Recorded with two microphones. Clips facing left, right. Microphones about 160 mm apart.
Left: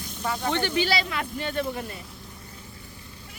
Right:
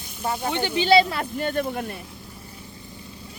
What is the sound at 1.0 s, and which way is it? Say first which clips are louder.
Speech: right 4 dB; 35° right (ahead or behind).